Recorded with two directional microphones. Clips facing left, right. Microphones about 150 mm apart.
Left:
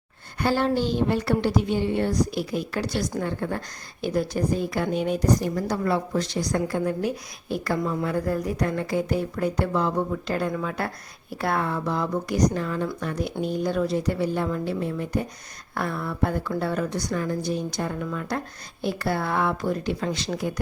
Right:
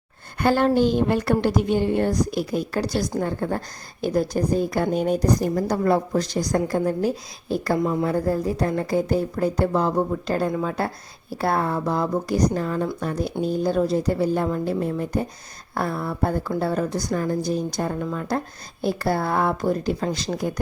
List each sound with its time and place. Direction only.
0.3 s speech: 55° right (ahead or behind)